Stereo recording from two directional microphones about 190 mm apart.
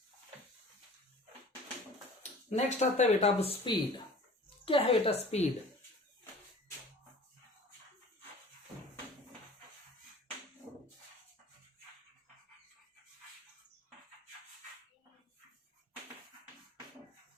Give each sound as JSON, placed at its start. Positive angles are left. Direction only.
{"t": 2.6, "sound": "a woman's voice", "side_deg": 35}